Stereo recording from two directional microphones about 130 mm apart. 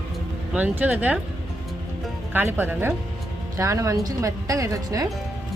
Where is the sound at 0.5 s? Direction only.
10° right (ahead or behind).